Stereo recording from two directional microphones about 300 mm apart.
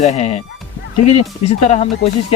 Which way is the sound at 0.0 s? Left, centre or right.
Left.